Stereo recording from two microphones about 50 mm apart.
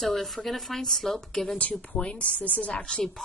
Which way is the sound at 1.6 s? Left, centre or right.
Left.